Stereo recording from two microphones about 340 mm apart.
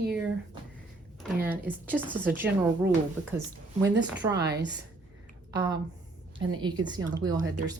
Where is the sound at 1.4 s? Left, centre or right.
Centre.